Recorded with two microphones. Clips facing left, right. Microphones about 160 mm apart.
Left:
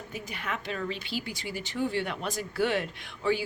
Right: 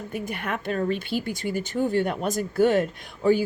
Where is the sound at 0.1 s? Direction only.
55° right (ahead or behind).